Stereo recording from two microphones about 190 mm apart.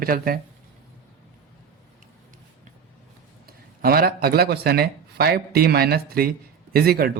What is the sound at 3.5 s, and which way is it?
Speech, 55° right (ahead or behind).